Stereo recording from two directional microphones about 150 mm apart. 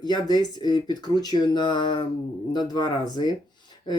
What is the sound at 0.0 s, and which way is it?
Speech, 25° left (ahead or behind).